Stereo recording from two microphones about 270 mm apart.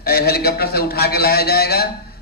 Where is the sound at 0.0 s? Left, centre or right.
Left.